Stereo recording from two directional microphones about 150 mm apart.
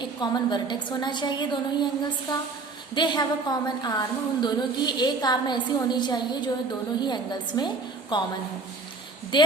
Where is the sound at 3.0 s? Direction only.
30° left (ahead or behind).